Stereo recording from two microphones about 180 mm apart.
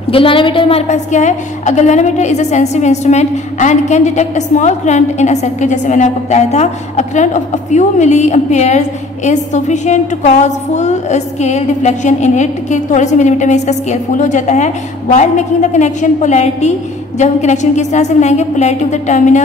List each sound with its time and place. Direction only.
0.1 s a woman's voice: 30° left (ahead or behind)